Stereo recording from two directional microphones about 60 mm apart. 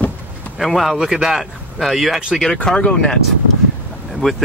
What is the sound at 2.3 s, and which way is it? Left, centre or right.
Speech, centre.